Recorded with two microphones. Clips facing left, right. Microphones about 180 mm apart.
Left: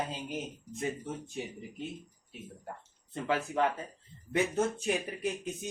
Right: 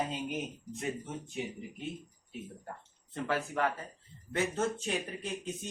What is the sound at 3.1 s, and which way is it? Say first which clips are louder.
Speech: left 2 dB; 15° left (ahead or behind).